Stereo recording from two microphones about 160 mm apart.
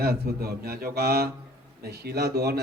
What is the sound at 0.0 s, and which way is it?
A man's voice, 75° right (ahead or behind).